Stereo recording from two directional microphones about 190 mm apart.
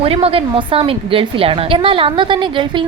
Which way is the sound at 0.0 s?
30° right (ahead or behind).